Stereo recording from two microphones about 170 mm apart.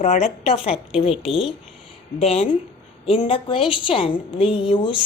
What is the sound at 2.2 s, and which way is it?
A woman's voice, 40° left (ahead or behind).